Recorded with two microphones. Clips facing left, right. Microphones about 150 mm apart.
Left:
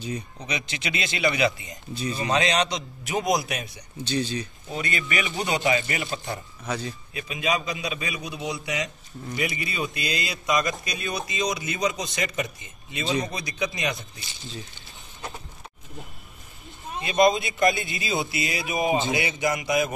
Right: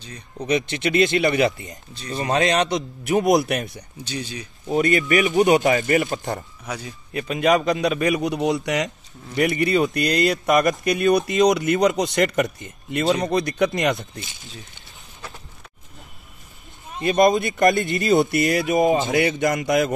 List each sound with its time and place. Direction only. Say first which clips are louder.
0.5 s speech: right 11 dB; 50° right (ahead or behind)
4.0 s speech: left 4 dB; 10° right (ahead or behind)
4.6 s speech: right 14 dB; 50° right (ahead or behind)
6.6 s speech: left 1 dB; 10° right (ahead or behind)
7.2 s speech: right 9 dB; 60° right (ahead or behind)
7.8 s a man's voice: right 11 dB; 80° right
9.4 s speech: right 11 dB; 60° right (ahead or behind)
17.0 s speech: right 4 dB; 45° right (ahead or behind)
18.3 s speech: right 10 dB; 65° right (ahead or behind)
18.7 s speech: right 2 dB; 45° right (ahead or behind)